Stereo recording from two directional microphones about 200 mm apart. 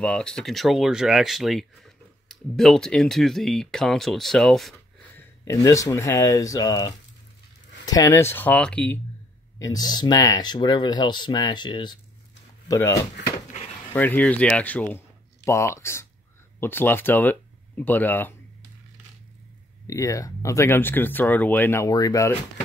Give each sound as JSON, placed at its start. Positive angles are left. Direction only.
{"t": 0.0, "sound": "speech", "side_deg": 5}
{"t": 5.4, "sound": "speech", "side_deg": 15}
{"t": 9.6, "sound": "speech", "side_deg": 20}
{"t": 13.5, "sound": "a sound", "side_deg": 30}
{"t": 13.9, "sound": "speech", "side_deg": 10}
{"t": 19.9, "sound": "speech", "side_deg": 15}